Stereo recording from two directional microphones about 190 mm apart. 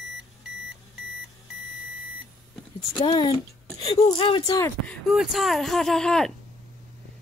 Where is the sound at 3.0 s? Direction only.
25° left (ahead or behind).